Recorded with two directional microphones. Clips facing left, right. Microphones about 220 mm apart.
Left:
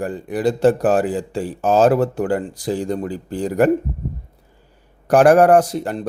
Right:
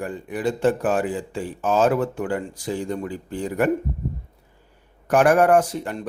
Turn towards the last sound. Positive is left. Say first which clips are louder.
# left 4 dB
turn(degrees=35)  # may be behind; listen again after turning